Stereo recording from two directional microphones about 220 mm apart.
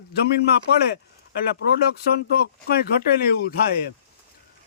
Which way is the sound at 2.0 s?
45° left (ahead or behind).